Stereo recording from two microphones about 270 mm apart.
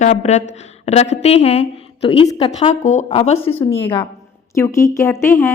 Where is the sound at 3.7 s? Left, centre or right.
Centre.